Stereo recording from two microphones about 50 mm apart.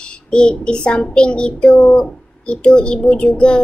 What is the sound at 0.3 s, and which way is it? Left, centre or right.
A child's voice, centre.